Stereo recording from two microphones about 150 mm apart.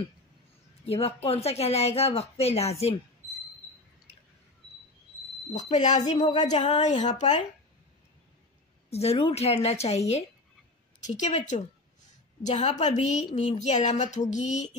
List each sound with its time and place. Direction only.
0.8 s a woman's voice: 40° left (ahead or behind)
5.5 s a woman's voice: 50° left (ahead or behind)
8.9 s a woman's voice: 45° left (ahead or behind)